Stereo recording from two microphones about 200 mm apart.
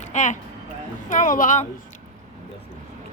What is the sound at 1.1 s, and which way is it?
Speech, 40° left (ahead or behind).